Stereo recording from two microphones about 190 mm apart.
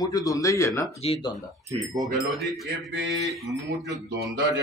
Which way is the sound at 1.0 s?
30° left (ahead or behind).